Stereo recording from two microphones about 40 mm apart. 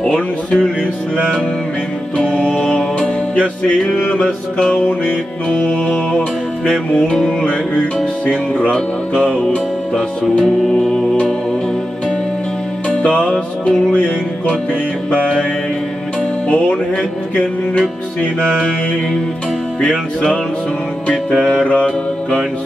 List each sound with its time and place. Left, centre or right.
0.1 s music: left
2.1 s music: left
5.0 s music: left
8.3 s music: left
8.7 s music: left
12.9 s music: left
13.3 s music: centre
13.9 s music: left
16.4 s music: left